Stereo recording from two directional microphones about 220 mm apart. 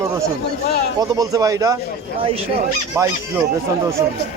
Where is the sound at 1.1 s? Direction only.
15° right (ahead or behind).